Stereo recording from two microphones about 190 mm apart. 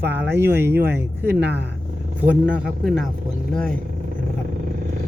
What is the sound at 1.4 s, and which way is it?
Speech, 65° right (ahead or behind).